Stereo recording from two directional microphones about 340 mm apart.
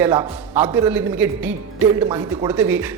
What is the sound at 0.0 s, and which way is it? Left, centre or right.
A man's voice, centre.